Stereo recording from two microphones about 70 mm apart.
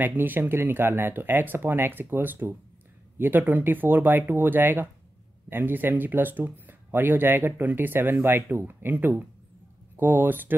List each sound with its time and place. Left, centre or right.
0.0 s speech: right